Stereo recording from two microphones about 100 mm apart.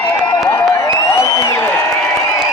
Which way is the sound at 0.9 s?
35° left (ahead or behind).